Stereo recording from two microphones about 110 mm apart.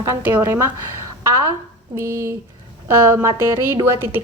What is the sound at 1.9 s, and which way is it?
Speech, 25° right (ahead or behind).